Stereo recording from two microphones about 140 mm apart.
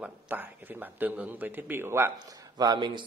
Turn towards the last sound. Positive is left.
turn(degrees=-30)  # may be behind; listen again after turning